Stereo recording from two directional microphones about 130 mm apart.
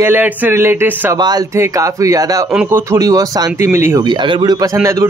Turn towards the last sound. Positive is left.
turn(degrees=-20)  # may be behind; listen again after turning